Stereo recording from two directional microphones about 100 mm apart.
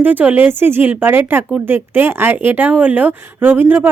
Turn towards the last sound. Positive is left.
turn(degrees=-20)  # may be behind; listen again after turning